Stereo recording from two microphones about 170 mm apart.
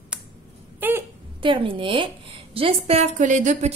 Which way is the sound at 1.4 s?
30° right (ahead or behind).